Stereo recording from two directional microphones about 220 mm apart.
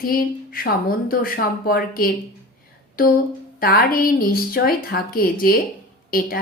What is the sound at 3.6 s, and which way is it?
A woman's voice, 45° left (ahead or behind).